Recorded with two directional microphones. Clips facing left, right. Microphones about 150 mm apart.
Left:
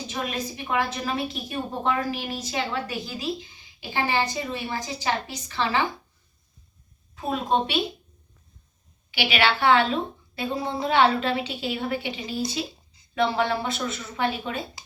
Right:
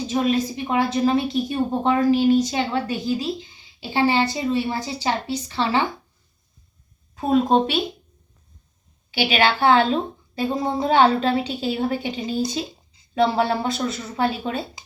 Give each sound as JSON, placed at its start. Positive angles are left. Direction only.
{"t": 0.1, "sound": "a woman's voice", "side_deg": -25}
{"t": 7.2, "sound": "a woman's voice", "side_deg": -40}
{"t": 9.1, "sound": "a woman's voice", "side_deg": -35}